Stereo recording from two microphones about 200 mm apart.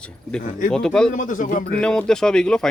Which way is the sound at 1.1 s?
40° left (ahead or behind).